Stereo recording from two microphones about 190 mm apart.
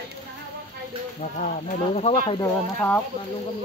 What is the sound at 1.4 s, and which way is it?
Speech, 40° left (ahead or behind).